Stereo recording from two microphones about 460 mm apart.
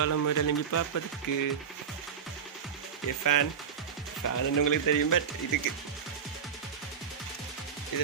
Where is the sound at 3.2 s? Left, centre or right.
Left.